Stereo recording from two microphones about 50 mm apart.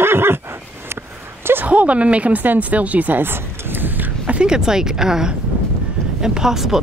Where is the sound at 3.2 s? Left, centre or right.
Right.